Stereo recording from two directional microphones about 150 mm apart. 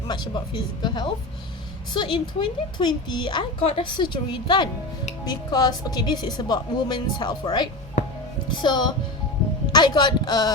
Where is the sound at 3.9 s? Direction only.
30° left (ahead or behind).